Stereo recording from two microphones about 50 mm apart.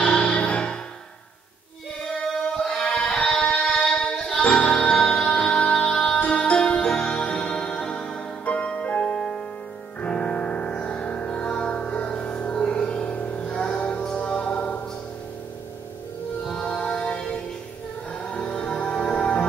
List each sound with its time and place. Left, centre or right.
0.0 s music: left
2.0 s choir: centre
2.8 s a sound: centre
3.3 s music: left
3.6 s music: centre
4.1 s music: left
16.6 s music: centre